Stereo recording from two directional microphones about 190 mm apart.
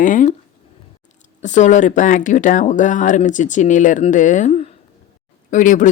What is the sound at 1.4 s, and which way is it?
A woman's voice, 40° left (ahead or behind).